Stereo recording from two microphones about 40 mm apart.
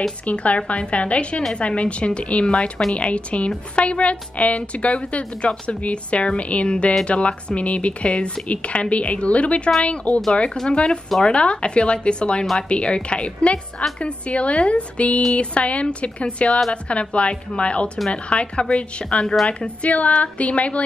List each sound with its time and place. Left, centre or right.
0.2 s a woman's voice: left